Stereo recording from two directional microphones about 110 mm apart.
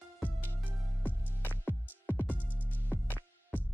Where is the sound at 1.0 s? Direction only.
15° left (ahead or behind).